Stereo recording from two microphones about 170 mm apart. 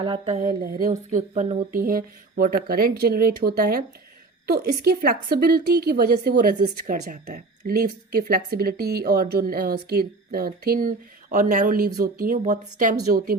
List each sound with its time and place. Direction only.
0.0 s speech: 35° right (ahead or behind)
0.3 s a woman's voice: 50° right (ahead or behind)